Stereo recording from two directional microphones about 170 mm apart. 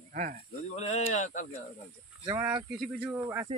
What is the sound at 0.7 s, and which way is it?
Speech, 40° left (ahead or behind).